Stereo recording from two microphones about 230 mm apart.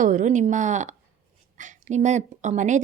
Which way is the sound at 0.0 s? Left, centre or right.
Right.